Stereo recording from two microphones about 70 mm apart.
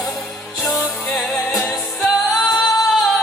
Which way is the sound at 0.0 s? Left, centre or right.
Centre.